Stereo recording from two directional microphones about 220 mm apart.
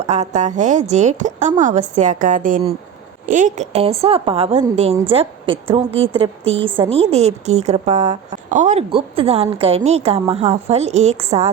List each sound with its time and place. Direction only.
0.0 s a woman's voice: 30° right (ahead or behind)